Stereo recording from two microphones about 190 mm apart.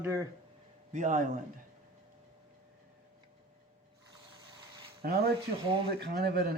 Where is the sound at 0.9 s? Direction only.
40° right (ahead or behind).